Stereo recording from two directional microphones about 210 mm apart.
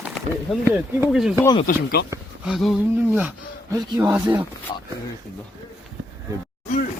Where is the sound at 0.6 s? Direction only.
5° right (ahead or behind).